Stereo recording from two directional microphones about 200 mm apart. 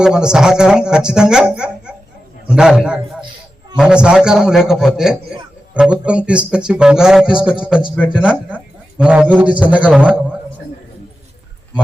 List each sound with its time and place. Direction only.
0.0 s a man's voice: 5° right (ahead or behind)